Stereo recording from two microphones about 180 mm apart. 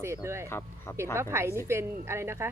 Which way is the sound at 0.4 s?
15° left (ahead or behind).